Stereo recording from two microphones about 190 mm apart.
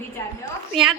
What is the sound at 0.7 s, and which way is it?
Speech, centre (ahead or behind).